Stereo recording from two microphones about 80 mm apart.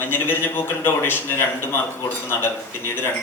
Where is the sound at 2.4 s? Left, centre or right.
Left.